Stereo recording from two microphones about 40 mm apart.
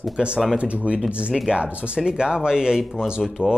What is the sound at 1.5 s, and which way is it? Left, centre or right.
Speech, right.